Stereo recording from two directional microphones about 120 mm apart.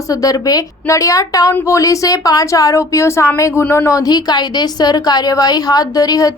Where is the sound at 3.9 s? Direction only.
30° left (ahead or behind).